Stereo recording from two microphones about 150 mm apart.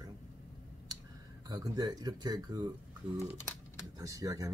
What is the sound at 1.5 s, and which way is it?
Speech, 25° right (ahead or behind).